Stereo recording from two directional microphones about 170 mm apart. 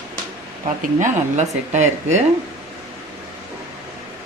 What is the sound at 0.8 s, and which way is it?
Speech, 45° right (ahead or behind).